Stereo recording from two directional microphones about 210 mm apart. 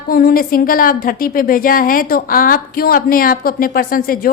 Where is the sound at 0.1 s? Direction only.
45° left (ahead or behind).